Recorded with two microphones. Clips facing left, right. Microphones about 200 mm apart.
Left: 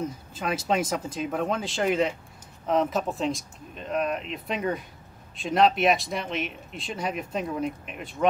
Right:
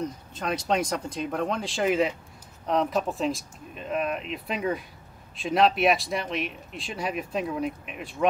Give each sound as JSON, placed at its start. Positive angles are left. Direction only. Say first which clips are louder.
{"t": 0.0, "sound": "speech", "louder": "even", "side_deg": 5}